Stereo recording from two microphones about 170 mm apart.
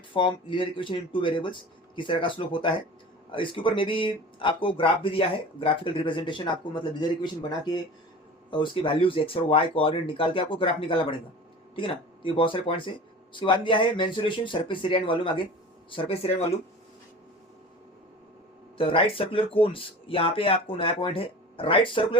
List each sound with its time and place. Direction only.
0.1 s speech: 30° left (ahead or behind)
18.8 s speech: 30° left (ahead or behind)